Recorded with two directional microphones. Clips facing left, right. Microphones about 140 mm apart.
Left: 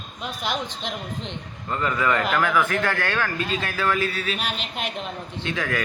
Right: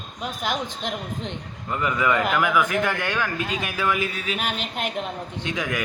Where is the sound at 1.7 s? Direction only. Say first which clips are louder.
Right 1 dB; 15° right (ahead or behind).